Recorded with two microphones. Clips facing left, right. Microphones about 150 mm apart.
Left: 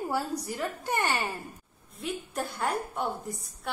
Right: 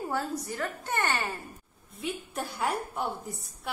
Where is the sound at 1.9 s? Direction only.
Centre (ahead or behind).